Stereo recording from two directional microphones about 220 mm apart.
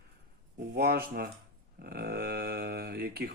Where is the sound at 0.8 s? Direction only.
45° right (ahead or behind).